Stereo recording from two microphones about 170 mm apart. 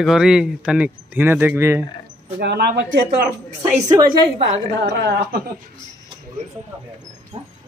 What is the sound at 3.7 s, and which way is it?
Speech, 20° right (ahead or behind).